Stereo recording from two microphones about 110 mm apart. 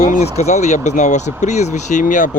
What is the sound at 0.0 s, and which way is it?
Speech, 85° left.